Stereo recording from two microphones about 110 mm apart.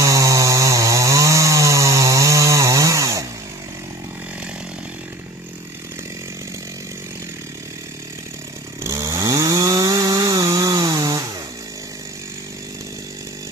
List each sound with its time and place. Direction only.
0.0 s chainsaw: 30° right (ahead or behind)
8.8 s chainsaw: 30° right (ahead or behind)